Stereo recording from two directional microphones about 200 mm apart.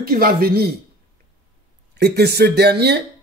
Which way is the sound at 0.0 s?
45° right (ahead or behind).